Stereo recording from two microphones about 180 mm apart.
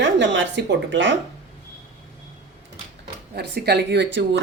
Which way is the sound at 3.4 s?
65° right (ahead or behind).